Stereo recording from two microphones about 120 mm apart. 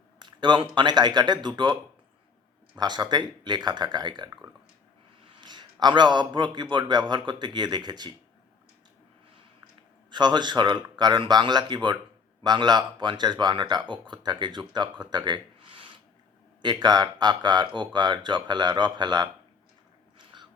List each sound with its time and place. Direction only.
0.2 s a sound: 40° right (ahead or behind)
0.8 s a man's voice: 35° right (ahead or behind)
10.1 s a man's voice: 35° right (ahead or behind)
20.1 s biting: 40° right (ahead or behind)